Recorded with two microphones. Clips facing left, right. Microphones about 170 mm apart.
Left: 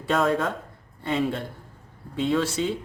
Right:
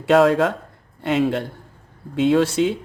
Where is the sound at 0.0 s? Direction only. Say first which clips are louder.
Right 8 dB; 80° right.